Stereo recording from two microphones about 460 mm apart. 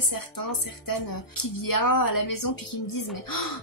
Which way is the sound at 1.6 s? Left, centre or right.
Left.